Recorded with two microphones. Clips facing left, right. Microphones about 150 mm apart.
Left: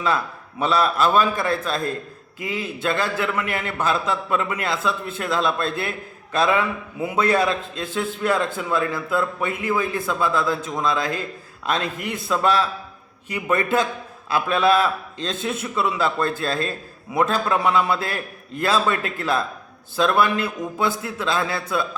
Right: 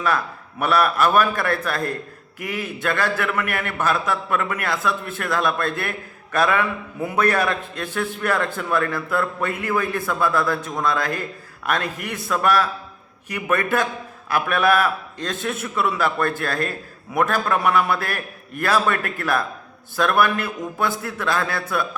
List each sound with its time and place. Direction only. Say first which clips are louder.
0.6 s a man's voice: right 1 dB; 25° left (ahead or behind)